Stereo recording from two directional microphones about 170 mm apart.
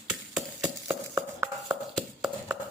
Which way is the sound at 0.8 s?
15° right (ahead or behind).